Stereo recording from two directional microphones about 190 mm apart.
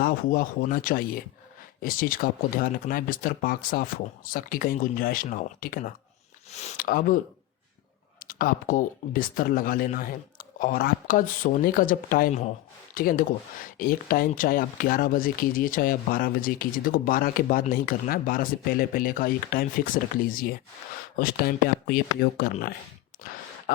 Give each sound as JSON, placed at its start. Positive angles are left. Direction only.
{"t": 0.0, "sound": "speech", "side_deg": 50}
{"t": 8.2, "sound": "speech", "side_deg": 50}
{"t": 23.1, "sound": "a sound", "side_deg": 45}
{"t": 23.7, "sound": "speech", "side_deg": 50}